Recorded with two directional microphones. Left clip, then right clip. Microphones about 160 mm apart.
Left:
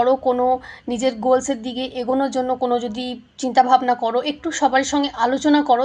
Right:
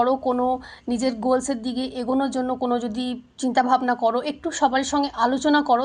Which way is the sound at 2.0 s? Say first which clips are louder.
Left 4 dB; 25° right (ahead or behind).